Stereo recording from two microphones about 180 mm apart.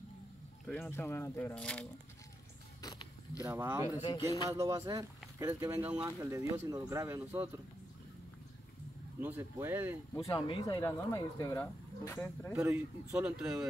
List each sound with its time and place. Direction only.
0.7 s speech: 10° left (ahead or behind)
2.8 s a sound: 20° left (ahead or behind)
3.4 s speech: 15° right (ahead or behind)
3.9 s speech: 25° left (ahead or behind)
4.5 s speech: 15° right (ahead or behind)
9.2 s speech: 10° right (ahead or behind)
10.1 s speech: 25° left (ahead or behind)
12.5 s speech: 10° right (ahead or behind)